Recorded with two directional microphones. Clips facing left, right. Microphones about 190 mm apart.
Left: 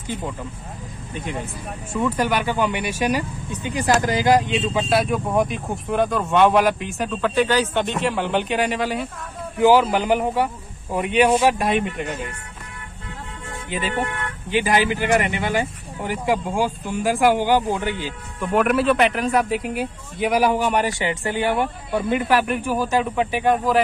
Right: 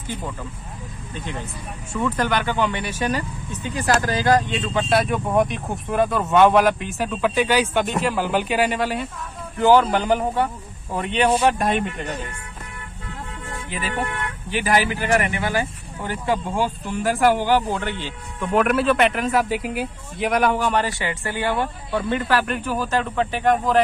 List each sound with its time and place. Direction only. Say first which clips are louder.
1.1 s speech: left 3 dB; 10° left (ahead or behind)
4.8 s speech: even; centre (ahead or behind)
13.7 s speech: left 3 dB; 25° left (ahead or behind)